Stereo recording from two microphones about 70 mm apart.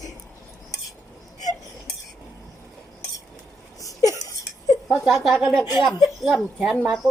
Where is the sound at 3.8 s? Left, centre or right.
Left.